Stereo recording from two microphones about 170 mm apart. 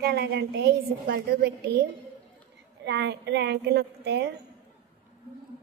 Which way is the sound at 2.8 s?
90° right.